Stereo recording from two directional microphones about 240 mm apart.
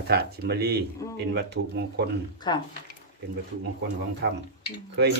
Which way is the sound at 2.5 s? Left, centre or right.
Centre.